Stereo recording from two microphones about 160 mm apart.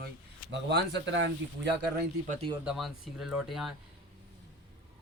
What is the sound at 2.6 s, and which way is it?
Speech, centre (ahead or behind).